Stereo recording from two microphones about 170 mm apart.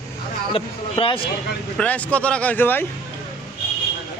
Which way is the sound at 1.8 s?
10° left (ahead or behind).